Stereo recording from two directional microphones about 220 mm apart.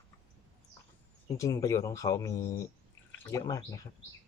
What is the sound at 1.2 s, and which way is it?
Speech, 15° left (ahead or behind).